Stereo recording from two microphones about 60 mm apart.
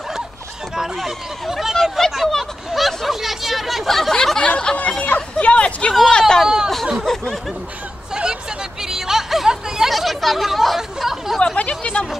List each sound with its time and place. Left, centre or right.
0.9 s speech: centre
2.0 s hubbub: centre
4.5 s snicker: centre
5.0 s a sound: left
6.0 s speech: centre
6.4 s a sound: centre
7.1 s speech: centre
8.1 s hubbub: centre
8.8 s chatter: centre
11.8 s speech: centre